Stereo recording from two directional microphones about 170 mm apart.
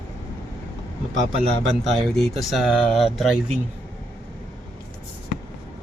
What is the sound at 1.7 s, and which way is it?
Speech, centre (ahead or behind).